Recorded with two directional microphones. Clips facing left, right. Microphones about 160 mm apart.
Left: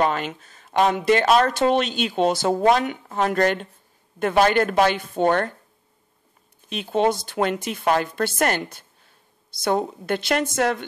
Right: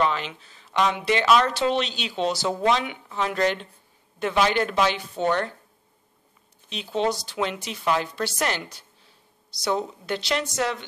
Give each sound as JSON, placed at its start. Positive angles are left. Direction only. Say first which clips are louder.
{"t": 0.0, "sound": "a woman's voice", "louder": "left 2 dB", "side_deg": 45}
{"t": 6.7, "sound": "a woman's voice", "louder": "left 4 dB", "side_deg": 50}